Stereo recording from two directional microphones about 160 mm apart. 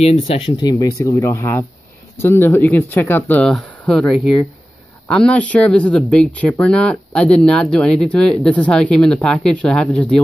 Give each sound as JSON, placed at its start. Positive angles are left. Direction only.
{"t": 0.0, "sound": "speech", "side_deg": 40}
{"t": 5.1, "sound": "speech", "side_deg": 5}